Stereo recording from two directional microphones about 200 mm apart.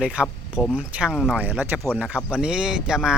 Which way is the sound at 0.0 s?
5° right (ahead or behind).